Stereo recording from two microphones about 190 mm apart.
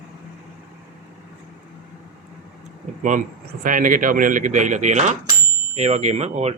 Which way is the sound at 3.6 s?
45° right (ahead or behind).